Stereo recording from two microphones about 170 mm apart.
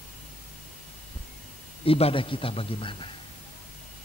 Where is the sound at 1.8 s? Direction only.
35° left (ahead or behind).